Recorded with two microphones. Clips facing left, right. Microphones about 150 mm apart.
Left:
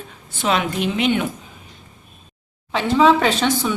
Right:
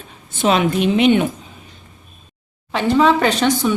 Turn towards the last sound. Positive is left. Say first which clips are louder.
# right 3 dB
turn(degrees=0)  # may be behind; listen again after turning